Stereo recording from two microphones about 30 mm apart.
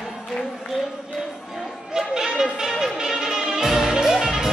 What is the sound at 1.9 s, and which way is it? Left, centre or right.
Music, centre.